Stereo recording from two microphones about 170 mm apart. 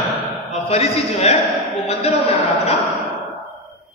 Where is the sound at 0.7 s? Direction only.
40° left (ahead or behind).